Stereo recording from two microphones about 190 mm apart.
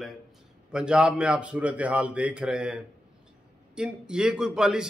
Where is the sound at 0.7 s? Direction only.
5° right (ahead or behind).